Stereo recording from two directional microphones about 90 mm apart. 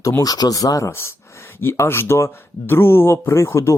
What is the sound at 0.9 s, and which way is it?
Speech, 30° left (ahead or behind).